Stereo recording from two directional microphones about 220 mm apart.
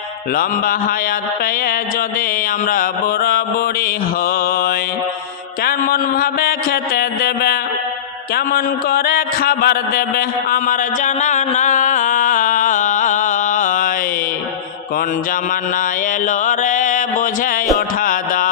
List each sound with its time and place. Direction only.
0.3 s mantra: 40° left (ahead or behind)
2.6 s mantra: 40° left (ahead or behind)
5.6 s a sound: 40° left (ahead or behind)
16.2 s music: 35° left (ahead or behind)